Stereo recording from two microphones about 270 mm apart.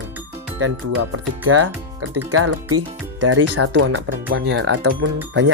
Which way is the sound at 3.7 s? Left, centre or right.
Right.